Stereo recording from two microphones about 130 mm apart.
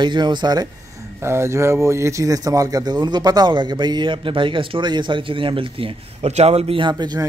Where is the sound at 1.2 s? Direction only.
20° right (ahead or behind).